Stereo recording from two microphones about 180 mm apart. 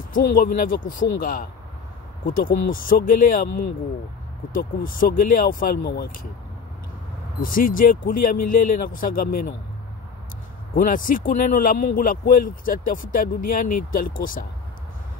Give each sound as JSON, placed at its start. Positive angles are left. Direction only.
{"t": 0.1, "sound": "speech", "side_deg": 50}
{"t": 4.5, "sound": "speech", "side_deg": 50}
{"t": 7.3, "sound": "speech", "side_deg": 50}
{"t": 10.7, "sound": "speech", "side_deg": 50}